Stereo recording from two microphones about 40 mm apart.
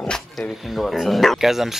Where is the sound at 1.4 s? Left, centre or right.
Centre.